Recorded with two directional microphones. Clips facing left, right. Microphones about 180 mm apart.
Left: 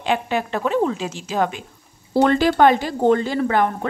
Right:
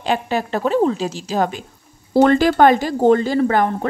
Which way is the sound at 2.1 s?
45° right (ahead or behind).